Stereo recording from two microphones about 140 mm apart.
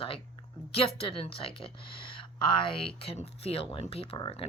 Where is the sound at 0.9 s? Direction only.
40° left (ahead or behind).